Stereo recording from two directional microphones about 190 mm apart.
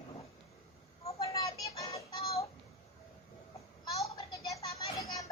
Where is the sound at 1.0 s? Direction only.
30° left (ahead or behind).